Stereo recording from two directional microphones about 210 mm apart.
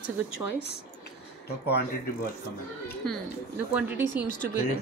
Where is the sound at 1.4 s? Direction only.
50° left (ahead or behind).